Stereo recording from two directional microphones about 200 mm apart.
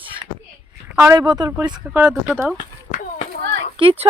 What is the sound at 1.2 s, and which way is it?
Speech, 20° right (ahead or behind).